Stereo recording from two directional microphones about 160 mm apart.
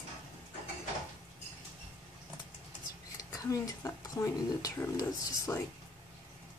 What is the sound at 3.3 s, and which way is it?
Speech, 20° left (ahead or behind).